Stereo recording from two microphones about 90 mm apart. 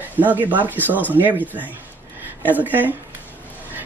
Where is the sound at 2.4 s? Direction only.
20° right (ahead or behind).